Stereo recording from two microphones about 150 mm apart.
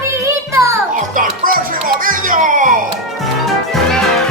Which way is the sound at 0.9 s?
60° right (ahead or behind).